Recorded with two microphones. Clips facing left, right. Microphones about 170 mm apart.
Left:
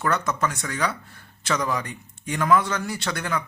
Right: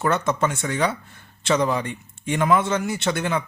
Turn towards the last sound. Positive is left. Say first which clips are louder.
# right 4 dB
turn(degrees=-25)  # may be behind; listen again after turning